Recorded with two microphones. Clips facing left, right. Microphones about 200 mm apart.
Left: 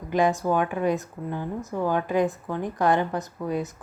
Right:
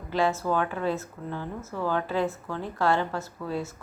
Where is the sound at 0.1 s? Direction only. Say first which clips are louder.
Left 3 dB; 15° left (ahead or behind).